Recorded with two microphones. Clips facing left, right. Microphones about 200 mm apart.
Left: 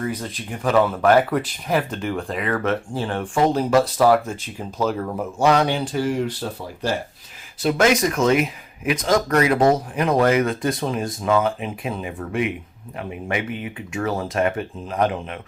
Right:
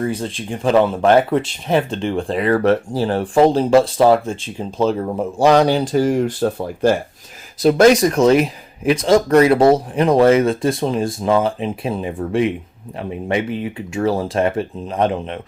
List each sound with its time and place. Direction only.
0.0 s speech: 30° right (ahead or behind); by 6.9 s 50° right (ahead or behind)
7.6 s speech: 35° right (ahead or behind)